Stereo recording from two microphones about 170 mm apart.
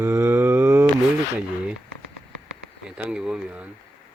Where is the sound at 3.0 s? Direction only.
5° right (ahead or behind).